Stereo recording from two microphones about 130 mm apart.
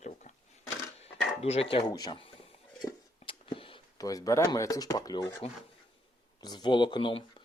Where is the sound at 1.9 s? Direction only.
30° left (ahead or behind).